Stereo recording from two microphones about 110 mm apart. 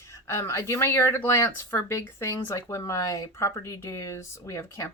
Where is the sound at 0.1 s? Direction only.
25° left (ahead or behind).